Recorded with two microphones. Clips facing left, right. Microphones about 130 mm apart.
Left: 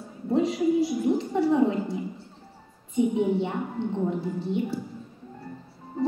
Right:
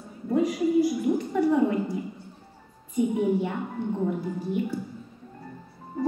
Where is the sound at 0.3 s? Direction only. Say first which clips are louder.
Even; 25° left (ahead or behind).